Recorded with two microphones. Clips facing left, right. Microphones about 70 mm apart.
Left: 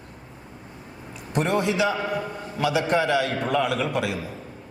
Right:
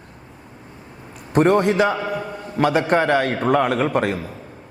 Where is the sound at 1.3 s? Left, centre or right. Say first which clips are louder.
Right 7 dB; right.